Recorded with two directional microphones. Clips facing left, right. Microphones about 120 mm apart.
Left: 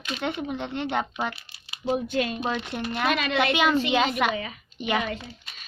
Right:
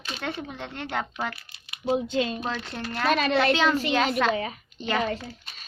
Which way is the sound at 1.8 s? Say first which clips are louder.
Right 1 dB; 20° right (ahead or behind).